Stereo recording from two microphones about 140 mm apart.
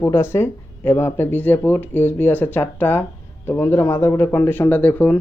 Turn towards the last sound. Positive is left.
turn(degrees=10)  # may be behind; listen again after turning